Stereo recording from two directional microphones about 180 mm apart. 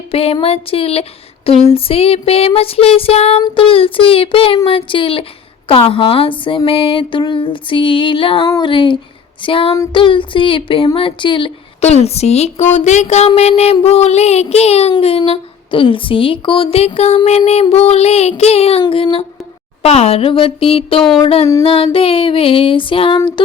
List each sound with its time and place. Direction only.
0.1 s child singing: 35° left (ahead or behind)
5.6 s speech: 30° left (ahead or behind)
12.7 s child singing: 40° left (ahead or behind)
21.4 s speech: 20° left (ahead or behind)
21.7 s speech: 30° left (ahead or behind)